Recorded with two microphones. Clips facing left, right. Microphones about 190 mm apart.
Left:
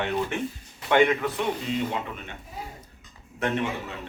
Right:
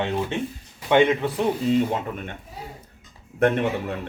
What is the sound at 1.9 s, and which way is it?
Speech, 50° right (ahead or behind).